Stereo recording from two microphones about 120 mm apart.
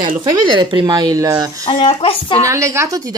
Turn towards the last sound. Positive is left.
turn(degrees=-30)  # may be behind; listen again after turning